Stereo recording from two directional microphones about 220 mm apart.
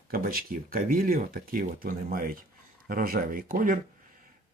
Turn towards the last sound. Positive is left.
turn(degrees=-40)  # may be behind; listen again after turning